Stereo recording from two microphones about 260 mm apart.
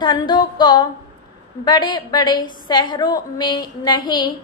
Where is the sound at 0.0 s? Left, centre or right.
Centre.